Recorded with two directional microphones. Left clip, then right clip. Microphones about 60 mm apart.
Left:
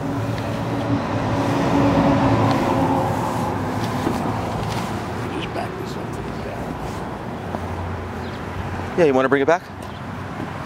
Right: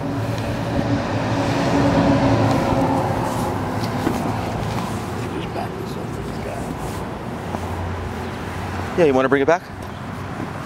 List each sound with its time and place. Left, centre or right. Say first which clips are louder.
1.0 s vehicle: even; right
8.9 s speech: even; centre